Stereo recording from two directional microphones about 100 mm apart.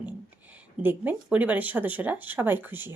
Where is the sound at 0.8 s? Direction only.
20° right (ahead or behind).